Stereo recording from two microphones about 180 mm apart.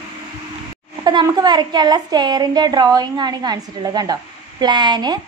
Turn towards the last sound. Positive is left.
turn(degrees=-25)  # may be behind; listen again after turning